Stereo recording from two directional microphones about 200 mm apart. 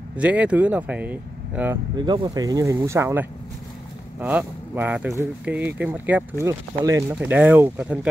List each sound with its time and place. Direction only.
0.1 s speech: 5° right (ahead or behind)
2.0 s speech: 20° right (ahead or behind); by 8.1 s 5° right (ahead or behind)